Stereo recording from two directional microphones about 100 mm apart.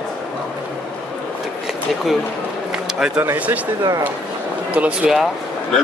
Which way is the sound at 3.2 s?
20° right (ahead or behind).